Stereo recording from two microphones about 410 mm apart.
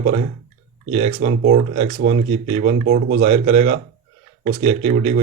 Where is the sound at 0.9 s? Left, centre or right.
Centre.